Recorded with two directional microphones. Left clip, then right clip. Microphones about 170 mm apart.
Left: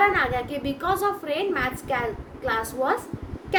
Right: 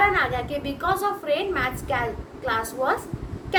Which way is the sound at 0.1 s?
35° left (ahead or behind).